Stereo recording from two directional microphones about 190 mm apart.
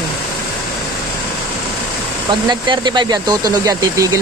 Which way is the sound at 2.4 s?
25° right (ahead or behind).